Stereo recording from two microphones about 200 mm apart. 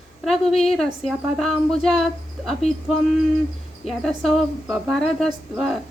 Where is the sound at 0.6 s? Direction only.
Centre (ahead or behind).